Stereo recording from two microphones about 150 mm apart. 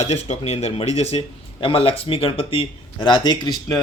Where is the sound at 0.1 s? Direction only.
45° left (ahead or behind).